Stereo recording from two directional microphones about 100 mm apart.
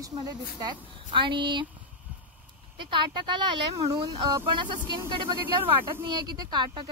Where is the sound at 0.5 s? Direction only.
50° right (ahead or behind).